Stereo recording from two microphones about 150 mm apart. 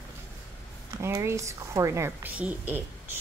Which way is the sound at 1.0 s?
15° right (ahead or behind).